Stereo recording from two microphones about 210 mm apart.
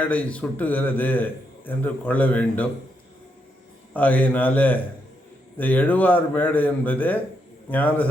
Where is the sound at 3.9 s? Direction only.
10° left (ahead or behind).